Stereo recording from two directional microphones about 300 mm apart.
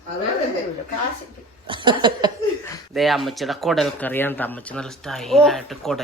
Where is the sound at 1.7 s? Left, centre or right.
Centre.